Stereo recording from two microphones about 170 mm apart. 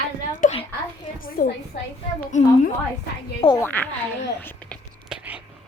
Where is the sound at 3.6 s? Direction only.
10° left (ahead or behind).